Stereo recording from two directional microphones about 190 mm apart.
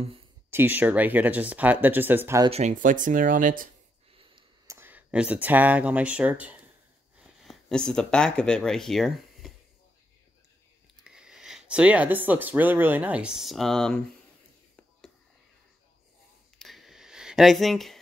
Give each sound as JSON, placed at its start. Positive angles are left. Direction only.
{"t": 0.5, "sound": "speech", "side_deg": -10}
{"t": 2.5, "sound": "speech", "side_deg": -40}
{"t": 4.1, "sound": "a sound", "side_deg": -25}
{"t": 4.6, "sound": "speech", "side_deg": -10}
{"t": 11.1, "sound": "speech", "side_deg": -5}
{"t": 16.5, "sound": "a sound", "side_deg": 0}